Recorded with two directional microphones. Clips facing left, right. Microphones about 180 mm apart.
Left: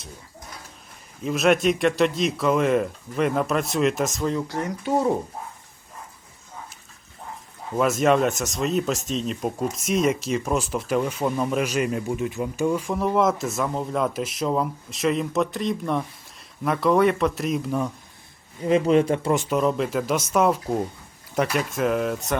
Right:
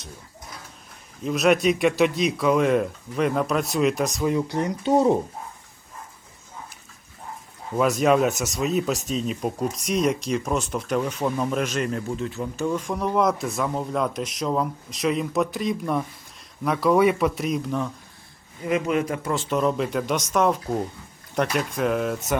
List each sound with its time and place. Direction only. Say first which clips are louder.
1.2 s speech: even; centre (ahead or behind)
4.3 s speech: right 3 dB; 15° right (ahead or behind)
7.8 s speech: even; centre (ahead or behind)
18.6 s speech: left 5 dB; 30° left (ahead or behind)
19.4 s speech: left 1 dB; 5° left (ahead or behind)